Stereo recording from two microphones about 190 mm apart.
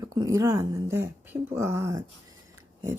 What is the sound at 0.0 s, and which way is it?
Speech, 20° right (ahead or behind).